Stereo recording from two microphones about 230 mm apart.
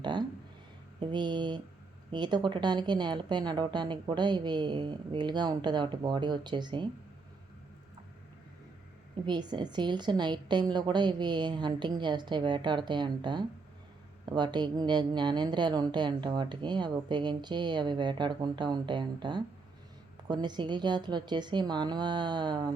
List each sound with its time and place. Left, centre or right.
0.0 s a woman's voice: centre
9.2 s a woman's voice: centre